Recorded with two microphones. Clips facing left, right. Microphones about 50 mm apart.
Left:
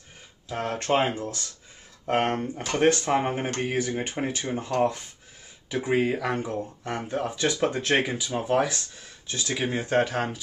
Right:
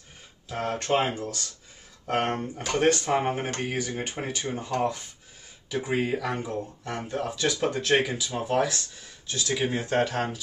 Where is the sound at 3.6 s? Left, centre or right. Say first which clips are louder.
Left 3 dB; centre.